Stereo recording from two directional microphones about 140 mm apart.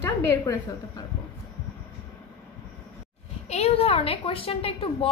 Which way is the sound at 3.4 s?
50° left (ahead or behind).